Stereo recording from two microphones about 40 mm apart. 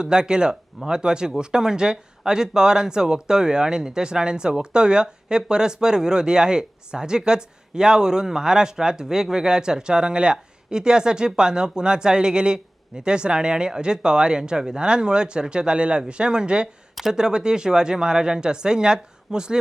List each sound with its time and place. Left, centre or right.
0.0 s speech: right